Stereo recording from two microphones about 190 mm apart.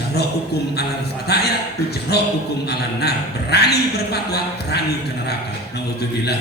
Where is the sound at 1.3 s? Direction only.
60° left (ahead or behind).